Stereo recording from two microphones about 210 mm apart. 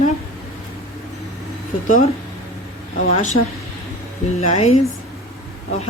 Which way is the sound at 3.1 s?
35° left (ahead or behind).